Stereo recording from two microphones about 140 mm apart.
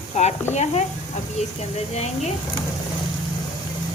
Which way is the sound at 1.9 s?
50° left (ahead or behind).